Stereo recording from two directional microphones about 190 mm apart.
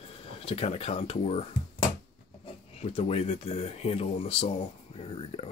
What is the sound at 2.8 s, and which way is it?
Speech, 30° left (ahead or behind).